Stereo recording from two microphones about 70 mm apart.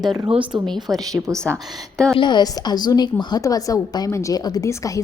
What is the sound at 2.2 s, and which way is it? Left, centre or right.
Speech, left.